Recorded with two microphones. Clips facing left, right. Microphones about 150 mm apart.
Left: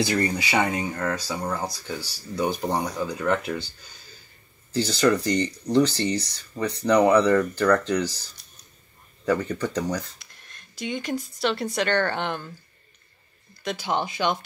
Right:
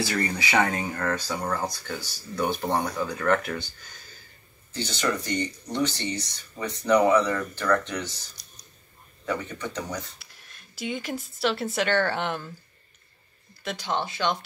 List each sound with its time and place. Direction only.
0.0 s speech: 20° left (ahead or behind)
4.7 s speech: 40° left (ahead or behind)
9.2 s speech: 35° left (ahead or behind)
10.1 s speech: 5° right (ahead or behind)
13.6 s speech: centre (ahead or behind)
13.8 s speech: 15° left (ahead or behind)